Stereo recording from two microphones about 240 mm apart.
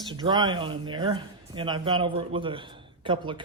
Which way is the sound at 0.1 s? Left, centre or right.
Centre.